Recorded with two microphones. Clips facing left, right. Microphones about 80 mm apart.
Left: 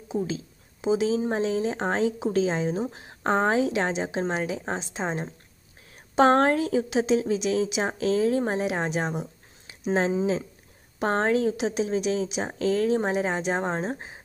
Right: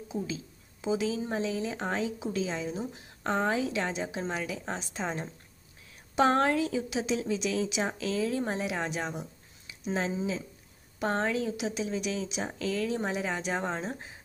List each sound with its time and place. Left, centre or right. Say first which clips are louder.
0.1 s a woman's voice: left 7 dB; left
1.3 s a woman's voice: left 6 dB; left
6.1 s a woman's voice: left 5 dB; left
7.8 s speech: left 7 dB; left
8.9 s a woman's voice: left 6 dB; left
9.7 s speech: left 7 dB; left
11.0 s speech: left 6 dB; left
11.5 s a woman's voice: left 6 dB; left
12.6 s speech: left 8 dB; left